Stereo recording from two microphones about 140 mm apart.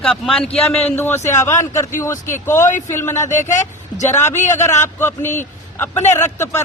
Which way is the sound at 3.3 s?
60° left (ahead or behind).